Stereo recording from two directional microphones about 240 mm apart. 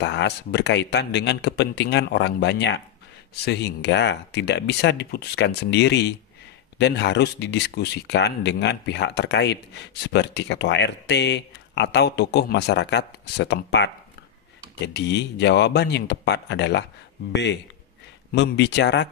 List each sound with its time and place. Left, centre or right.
0.0 s speech: left
15.0 s speech: left